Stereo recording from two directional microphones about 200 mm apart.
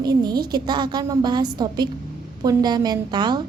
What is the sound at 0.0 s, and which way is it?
A woman's voice, 20° right (ahead or behind).